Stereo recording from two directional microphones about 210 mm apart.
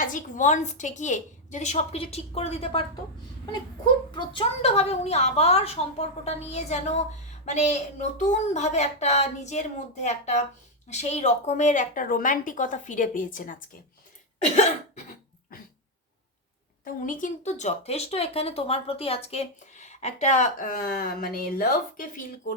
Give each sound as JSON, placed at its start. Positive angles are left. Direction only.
{"t": 0.0, "sound": "speech", "side_deg": 40}
{"t": 4.1, "sound": "a woman's voice", "side_deg": 20}
{"t": 16.8, "sound": "speech", "side_deg": 40}